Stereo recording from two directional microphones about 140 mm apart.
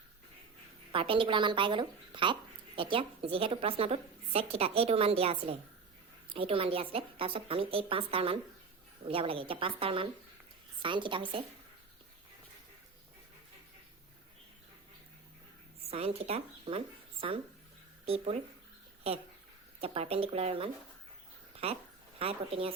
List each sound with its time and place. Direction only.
0.9 s a woman's voice: 40° right (ahead or behind)
15.9 s speech: 45° right (ahead or behind)
19.8 s speech: 45° right (ahead or behind)
22.2 s speech: 45° right (ahead or behind)